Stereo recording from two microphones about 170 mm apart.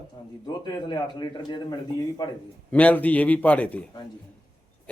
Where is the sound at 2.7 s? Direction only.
10° left (ahead or behind).